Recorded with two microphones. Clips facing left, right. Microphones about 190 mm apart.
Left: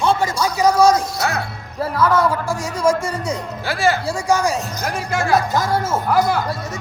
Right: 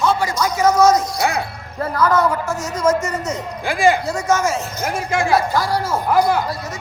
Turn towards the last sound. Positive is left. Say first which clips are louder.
# right 1 dB
turn(degrees=-10)  # may be behind; listen again after turning